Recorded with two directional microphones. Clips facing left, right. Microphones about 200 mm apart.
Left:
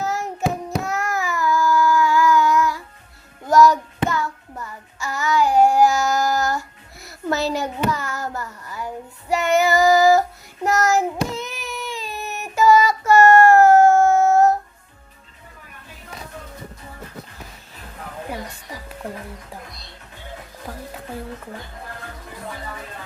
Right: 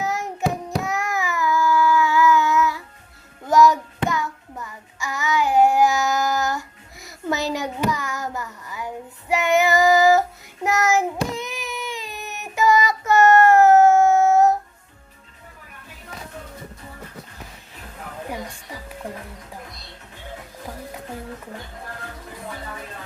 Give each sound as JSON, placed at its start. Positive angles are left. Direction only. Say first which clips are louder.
{"t": 0.0, "sound": "child singing", "louder": "left 1 dB", "side_deg": -15}